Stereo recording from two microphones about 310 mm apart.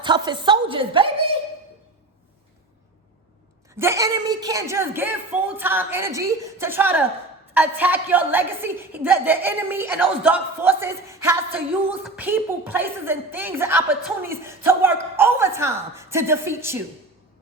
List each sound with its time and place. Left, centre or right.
0.0 s a woman's voice: centre
3.8 s a woman's voice: centre